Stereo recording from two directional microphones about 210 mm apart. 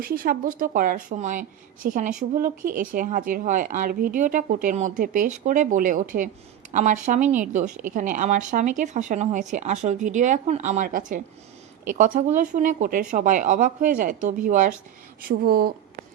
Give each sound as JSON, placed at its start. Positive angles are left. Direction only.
{"t": 0.0, "sound": "speech", "side_deg": -45}